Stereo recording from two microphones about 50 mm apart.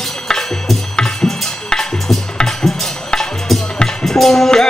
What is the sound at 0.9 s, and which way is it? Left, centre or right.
Music, centre.